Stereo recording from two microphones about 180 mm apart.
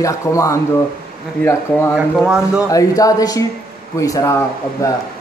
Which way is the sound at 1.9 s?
5° right (ahead or behind).